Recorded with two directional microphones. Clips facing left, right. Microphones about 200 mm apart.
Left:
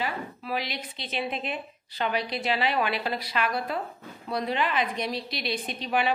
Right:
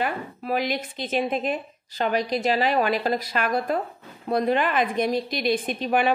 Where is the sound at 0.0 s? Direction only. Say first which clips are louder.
Right 4 dB; 50° right (ahead or behind).